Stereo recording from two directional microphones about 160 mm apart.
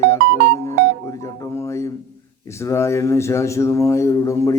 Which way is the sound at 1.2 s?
20° left (ahead or behind).